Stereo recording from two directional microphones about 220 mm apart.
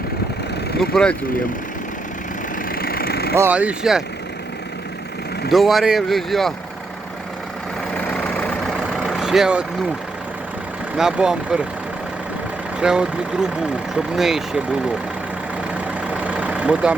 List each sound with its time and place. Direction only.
0.8 s speech: 5° left (ahead or behind)
2.7 s vehicle: 45° left (ahead or behind)
3.3 s speech: 10° right (ahead or behind)
5.5 s speech: centre (ahead or behind)
8.0 s vehicle: 5° left (ahead or behind)
10.9 s speech: centre (ahead or behind)
12.8 s speech: 5° right (ahead or behind)
16.0 s vehicle: 5° right (ahead or behind)